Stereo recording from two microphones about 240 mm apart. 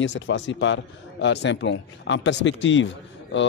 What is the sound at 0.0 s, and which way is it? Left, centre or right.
Speech, left.